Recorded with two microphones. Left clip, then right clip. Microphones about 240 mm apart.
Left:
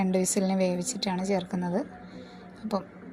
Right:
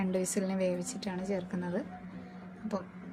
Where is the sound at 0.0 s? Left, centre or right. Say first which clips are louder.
Left 6 dB; centre.